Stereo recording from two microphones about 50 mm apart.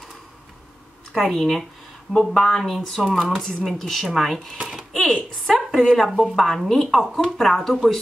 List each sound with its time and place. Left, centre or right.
1.1 s a woman's voice: centre
4.6 s cash register: centre
4.9 s a woman's voice: centre